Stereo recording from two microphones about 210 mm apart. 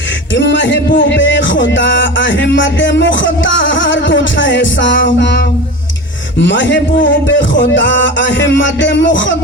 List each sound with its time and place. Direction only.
0.3 s music: 60° left (ahead or behind)
6.4 s music: 60° left (ahead or behind)